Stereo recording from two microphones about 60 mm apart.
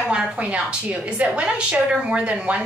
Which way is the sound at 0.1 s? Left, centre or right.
Centre.